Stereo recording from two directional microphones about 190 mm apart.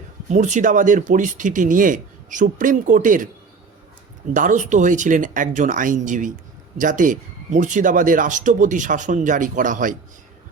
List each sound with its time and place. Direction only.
0.3 s speech: 40° right (ahead or behind)
4.4 s speech: 40° right (ahead or behind)